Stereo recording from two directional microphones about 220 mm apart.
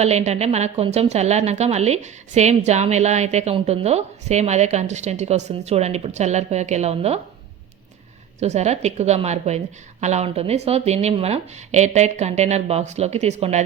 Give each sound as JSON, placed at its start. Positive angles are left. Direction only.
{"t": 0.0, "sound": "a woman's voice", "side_deg": -30}
{"t": 8.4, "sound": "a woman's voice", "side_deg": -30}